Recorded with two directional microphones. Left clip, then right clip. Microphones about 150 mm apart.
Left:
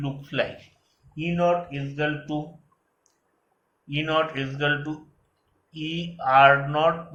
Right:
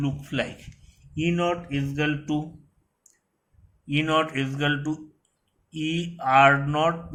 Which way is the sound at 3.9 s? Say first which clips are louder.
Right 1 dB; 60° right (ahead or behind).